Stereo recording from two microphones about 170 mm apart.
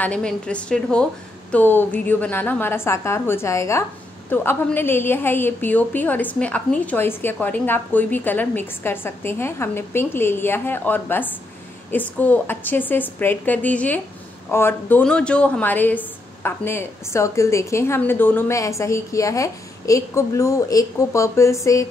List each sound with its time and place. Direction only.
0.0 s a woman's voice: 5° left (ahead or behind)